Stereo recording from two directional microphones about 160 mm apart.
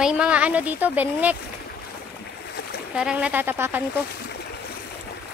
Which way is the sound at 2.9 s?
5° right (ahead or behind).